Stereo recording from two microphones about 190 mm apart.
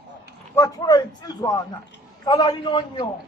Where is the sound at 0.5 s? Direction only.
15° left (ahead or behind).